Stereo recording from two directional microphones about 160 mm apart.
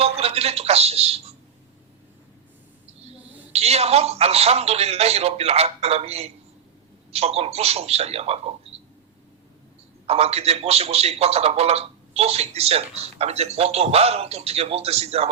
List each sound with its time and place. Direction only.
0.0 s a sound: 40° right (ahead or behind)
3.5 s a man's voice: 40° right (ahead or behind)
10.1 s a man's voice: 40° right (ahead or behind)